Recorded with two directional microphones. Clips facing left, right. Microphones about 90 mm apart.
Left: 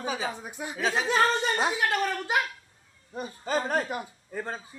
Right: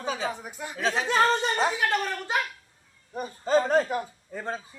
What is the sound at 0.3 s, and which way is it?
Speech, 15° left (ahead or behind).